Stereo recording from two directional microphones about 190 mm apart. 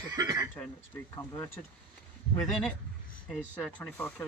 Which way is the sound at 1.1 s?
15° left (ahead or behind).